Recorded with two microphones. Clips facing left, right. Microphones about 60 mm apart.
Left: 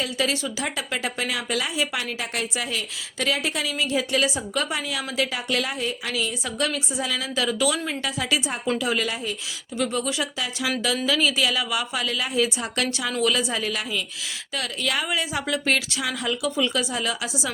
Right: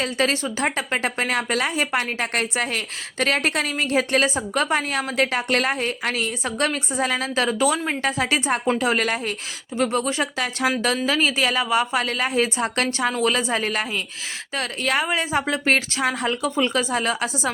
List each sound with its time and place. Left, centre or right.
0.0 s a woman's voice: right
10.8 s a woman's voice: right